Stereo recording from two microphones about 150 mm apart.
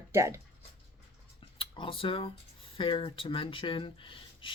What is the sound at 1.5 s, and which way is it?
Speech, 35° left (ahead or behind).